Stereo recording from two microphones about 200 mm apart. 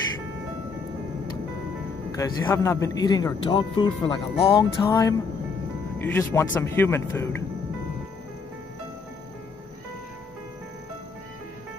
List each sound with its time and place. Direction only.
2.1 s speech: 15° left (ahead or behind)
4.8 s speech: 15° left (ahead or behind)